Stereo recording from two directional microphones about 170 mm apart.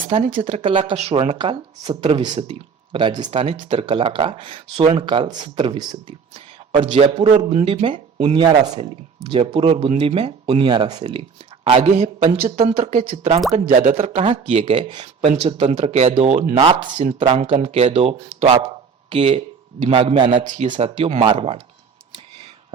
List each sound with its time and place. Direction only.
0.0 s speech: 30° right (ahead or behind)
7.5 s speech: 35° right (ahead or behind)
15.2 s speech: 40° right (ahead or behind)
16.6 s speech: 30° right (ahead or behind)
16.9 s speech: 45° right (ahead or behind)
17.2 s speech: 30° right (ahead or behind)